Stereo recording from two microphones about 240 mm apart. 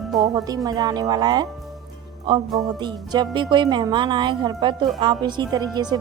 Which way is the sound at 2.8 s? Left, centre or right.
Centre.